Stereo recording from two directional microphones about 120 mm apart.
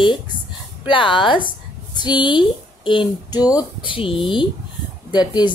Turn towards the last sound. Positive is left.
turn(degrees=40)  # may be behind; listen again after turning